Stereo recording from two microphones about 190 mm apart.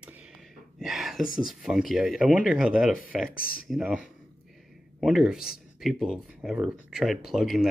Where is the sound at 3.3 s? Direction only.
50° left (ahead or behind).